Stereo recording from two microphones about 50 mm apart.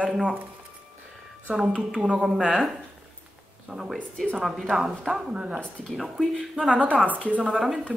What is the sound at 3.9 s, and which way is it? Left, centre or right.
Speech, left.